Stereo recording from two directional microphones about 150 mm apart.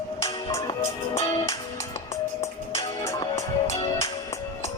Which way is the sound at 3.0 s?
20° left (ahead or behind).